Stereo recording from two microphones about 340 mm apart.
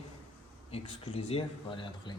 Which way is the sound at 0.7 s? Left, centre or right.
Centre.